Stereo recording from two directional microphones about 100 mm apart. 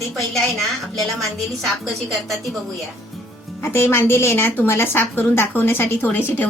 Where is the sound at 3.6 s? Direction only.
25° left (ahead or behind).